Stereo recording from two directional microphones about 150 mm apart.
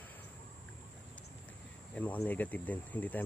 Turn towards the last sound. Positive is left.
turn(degrees=10)  # may be behind; listen again after turning